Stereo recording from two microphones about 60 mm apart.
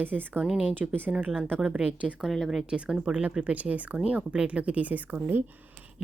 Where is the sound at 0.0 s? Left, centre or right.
Right.